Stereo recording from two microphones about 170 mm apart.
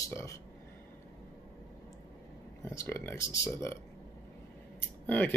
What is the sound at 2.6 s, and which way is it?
Speech, 15° left (ahead or behind).